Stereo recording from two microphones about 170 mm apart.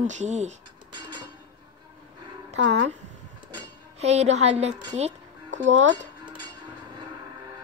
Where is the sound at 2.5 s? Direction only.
90° right.